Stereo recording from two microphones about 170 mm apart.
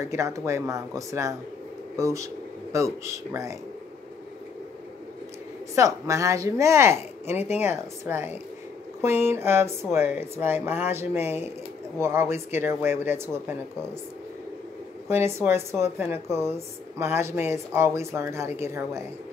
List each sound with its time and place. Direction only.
0.0 s speech: 15° right (ahead or behind)
5.8 s speech: 20° right (ahead or behind)
15.0 s speech: 15° right (ahead or behind)